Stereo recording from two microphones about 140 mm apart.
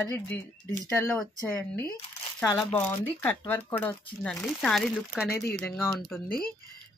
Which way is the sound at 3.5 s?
15° left (ahead or behind).